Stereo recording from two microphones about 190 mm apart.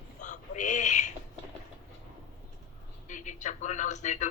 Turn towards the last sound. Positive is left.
turn(degrees=40)  # may be behind; listen again after turning